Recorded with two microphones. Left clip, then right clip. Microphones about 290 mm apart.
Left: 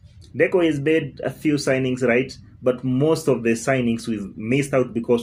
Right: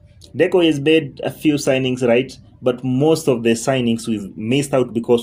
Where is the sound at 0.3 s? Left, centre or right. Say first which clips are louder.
Right 4 dB; right.